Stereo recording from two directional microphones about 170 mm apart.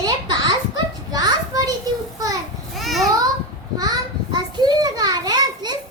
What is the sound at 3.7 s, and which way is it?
Child singing, 25° right (ahead or behind).